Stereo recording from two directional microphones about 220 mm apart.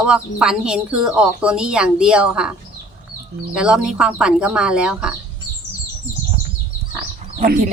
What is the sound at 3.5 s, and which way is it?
Speech, 5° right (ahead or behind).